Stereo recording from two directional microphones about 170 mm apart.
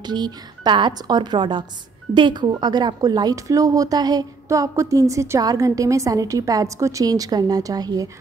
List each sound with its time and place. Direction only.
0.0 s speech: 25° right (ahead or behind)